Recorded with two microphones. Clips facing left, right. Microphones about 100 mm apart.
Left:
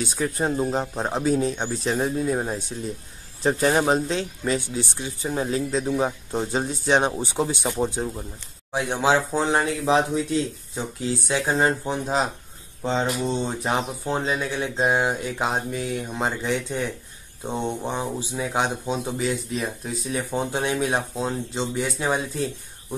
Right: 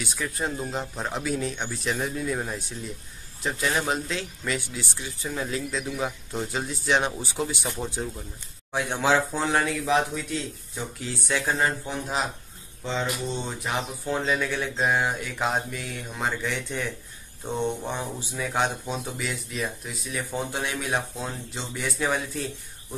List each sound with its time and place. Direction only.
0.0 s speech: 35° left (ahead or behind)
3.4 s speech: 40° left (ahead or behind); by 22.5 s 25° left (ahead or behind)